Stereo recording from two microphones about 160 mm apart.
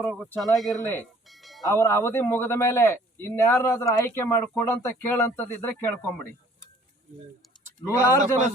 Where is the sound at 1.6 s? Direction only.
15° left (ahead or behind).